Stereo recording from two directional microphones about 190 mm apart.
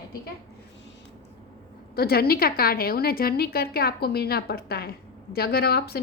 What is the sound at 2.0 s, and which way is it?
A woman's voice, 55° left (ahead or behind).